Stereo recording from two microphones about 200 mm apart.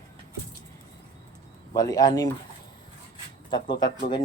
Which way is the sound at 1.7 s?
20° left (ahead or behind).